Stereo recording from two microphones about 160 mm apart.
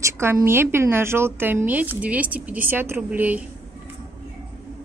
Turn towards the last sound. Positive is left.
turn(degrees=-10)  # may be behind; listen again after turning